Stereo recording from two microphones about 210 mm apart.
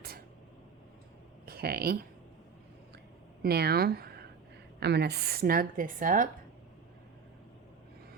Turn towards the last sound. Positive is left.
turn(degrees=-40)  # may be behind; listen again after turning